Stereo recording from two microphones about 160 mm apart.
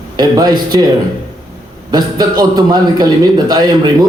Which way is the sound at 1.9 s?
25° right (ahead or behind).